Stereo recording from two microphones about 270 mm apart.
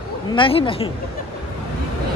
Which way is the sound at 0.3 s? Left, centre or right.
Centre.